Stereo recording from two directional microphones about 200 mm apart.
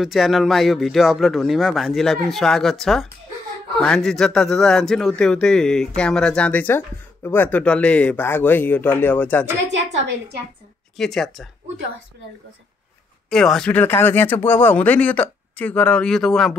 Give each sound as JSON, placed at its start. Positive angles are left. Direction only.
{"t": 0.0, "sound": "a man's voice", "side_deg": 0}
{"t": 11.0, "sound": "a man's voice", "side_deg": 0}
{"t": 13.3, "sound": "speech", "side_deg": 5}